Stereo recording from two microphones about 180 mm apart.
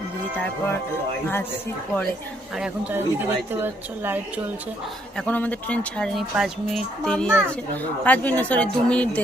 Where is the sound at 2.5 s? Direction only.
5° right (ahead or behind).